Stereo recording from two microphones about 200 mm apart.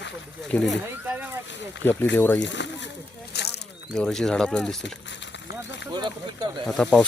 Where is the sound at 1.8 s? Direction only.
10° left (ahead or behind).